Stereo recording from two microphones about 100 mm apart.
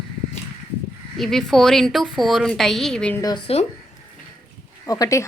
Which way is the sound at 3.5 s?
75° left (ahead or behind).